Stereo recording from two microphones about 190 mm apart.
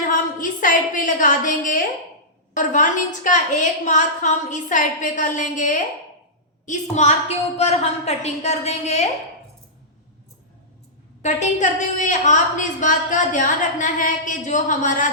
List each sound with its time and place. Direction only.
0.1 s a sound: 45° left (ahead or behind)
2.6 s a woman's voice: 40° left (ahead or behind)
11.2 s a woman's voice: 40° left (ahead or behind)